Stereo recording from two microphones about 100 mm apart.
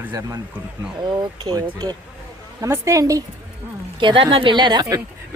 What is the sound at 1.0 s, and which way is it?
Speech, 50° right (ahead or behind).